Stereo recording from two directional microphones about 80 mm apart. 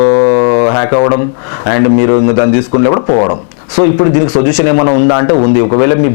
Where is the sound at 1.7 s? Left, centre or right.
Centre.